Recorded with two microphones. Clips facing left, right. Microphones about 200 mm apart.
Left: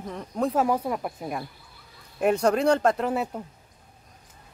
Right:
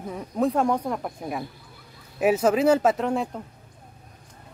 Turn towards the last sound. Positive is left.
turn(degrees=5)  # may be behind; listen again after turning